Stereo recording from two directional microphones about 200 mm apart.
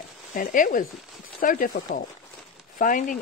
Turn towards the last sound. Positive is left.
turn(degrees=40)  # may be behind; listen again after turning